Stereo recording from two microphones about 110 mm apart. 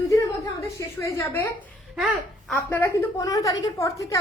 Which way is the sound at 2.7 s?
25° left (ahead or behind).